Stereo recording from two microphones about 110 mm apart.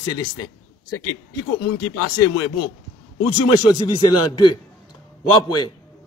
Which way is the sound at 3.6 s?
40° left (ahead or behind).